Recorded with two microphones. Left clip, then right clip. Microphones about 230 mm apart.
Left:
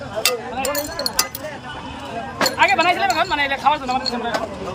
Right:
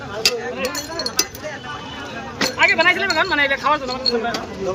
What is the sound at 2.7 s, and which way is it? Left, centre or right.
Speech, centre.